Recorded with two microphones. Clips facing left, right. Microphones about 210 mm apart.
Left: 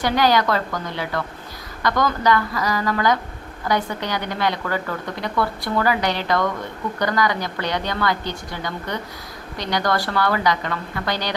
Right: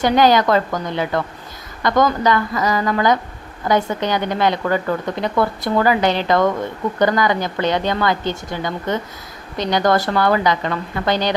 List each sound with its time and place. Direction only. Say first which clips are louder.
0.0 s a woman's voice: right 4 dB; 20° right (ahead or behind)